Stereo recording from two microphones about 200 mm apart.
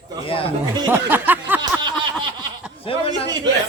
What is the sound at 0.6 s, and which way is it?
Snicker, 20° right (ahead or behind).